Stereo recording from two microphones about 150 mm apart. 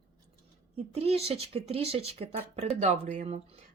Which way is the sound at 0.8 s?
40° right (ahead or behind).